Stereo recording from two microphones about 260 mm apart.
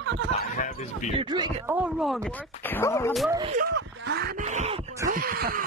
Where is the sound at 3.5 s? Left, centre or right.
Right.